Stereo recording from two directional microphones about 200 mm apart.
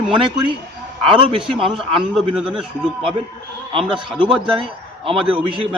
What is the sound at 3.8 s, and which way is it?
Speech, 5° right (ahead or behind).